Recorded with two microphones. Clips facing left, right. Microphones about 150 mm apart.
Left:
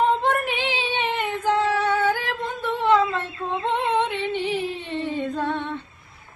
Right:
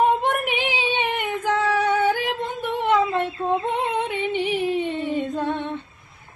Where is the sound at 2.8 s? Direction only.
20° right (ahead or behind).